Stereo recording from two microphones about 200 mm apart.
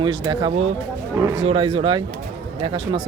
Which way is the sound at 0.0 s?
25° right (ahead or behind).